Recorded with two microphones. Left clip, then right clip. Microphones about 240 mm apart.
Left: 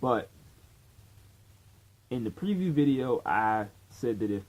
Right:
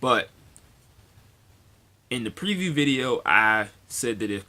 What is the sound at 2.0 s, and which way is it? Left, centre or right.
Speech, centre.